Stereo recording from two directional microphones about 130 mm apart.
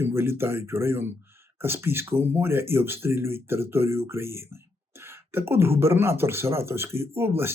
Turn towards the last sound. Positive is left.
turn(degrees=-20)  # may be behind; listen again after turning